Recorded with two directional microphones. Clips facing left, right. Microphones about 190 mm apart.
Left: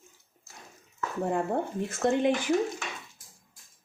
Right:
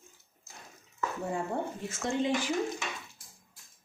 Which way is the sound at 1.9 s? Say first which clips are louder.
Left 6 dB; 55° left (ahead or behind).